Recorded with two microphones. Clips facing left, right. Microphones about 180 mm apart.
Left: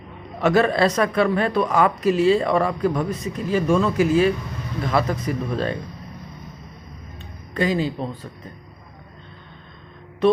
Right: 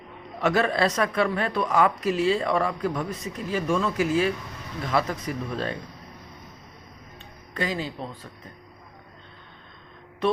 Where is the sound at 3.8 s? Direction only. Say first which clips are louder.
Left 6 dB; 30° left (ahead or behind).